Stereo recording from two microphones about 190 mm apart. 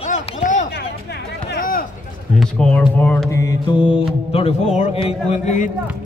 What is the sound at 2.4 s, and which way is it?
Speech, 5° left (ahead or behind).